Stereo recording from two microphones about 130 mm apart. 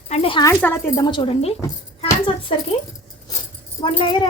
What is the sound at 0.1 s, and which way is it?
Speech, 45° left (ahead or behind).